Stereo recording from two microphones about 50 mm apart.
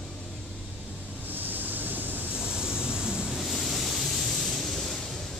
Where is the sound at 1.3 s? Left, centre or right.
Right.